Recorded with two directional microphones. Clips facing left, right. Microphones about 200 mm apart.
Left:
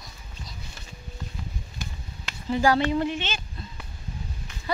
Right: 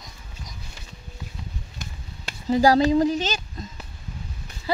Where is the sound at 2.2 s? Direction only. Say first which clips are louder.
Right 4 dB; 35° right (ahead or behind).